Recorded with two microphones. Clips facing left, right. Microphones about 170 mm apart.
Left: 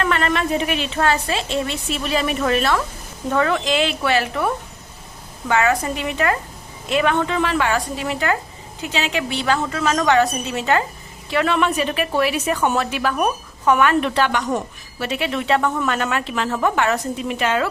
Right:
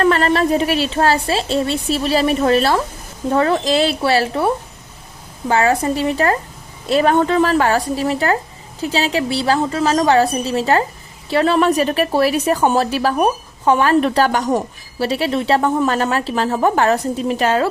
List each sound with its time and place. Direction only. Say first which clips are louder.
0.0 s a woman's voice: right 6 dB; 35° right (ahead or behind)